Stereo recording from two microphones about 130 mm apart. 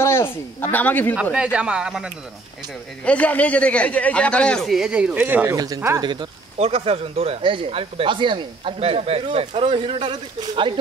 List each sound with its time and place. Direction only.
0.0 s a man's voice: 20° left (ahead or behind)
1.3 s speech: 10° right (ahead or behind)
3.1 s a man's voice: 10° left (ahead or behind); by 5.6 s 15° right (ahead or behind)
5.9 s speech: 35° right (ahead or behind)
6.6 s speech: 50° right (ahead or behind)